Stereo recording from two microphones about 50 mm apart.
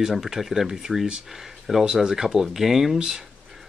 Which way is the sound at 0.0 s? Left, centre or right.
Centre.